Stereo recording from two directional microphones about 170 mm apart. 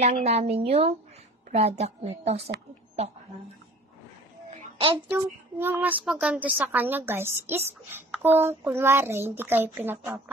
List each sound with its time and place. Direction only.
0.0 s a woman's voice: 40° right (ahead or behind)
4.7 s a child's voice: 30° right (ahead or behind)
5.1 s speech: 10° right (ahead or behind)